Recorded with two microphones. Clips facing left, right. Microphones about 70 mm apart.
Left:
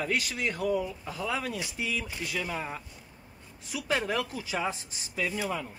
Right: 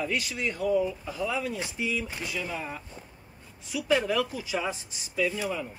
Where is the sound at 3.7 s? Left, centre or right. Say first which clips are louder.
Right 4 dB; left.